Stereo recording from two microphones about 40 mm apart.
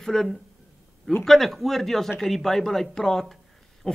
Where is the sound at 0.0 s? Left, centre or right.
Centre.